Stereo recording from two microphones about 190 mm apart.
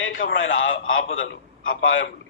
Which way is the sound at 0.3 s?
90° left.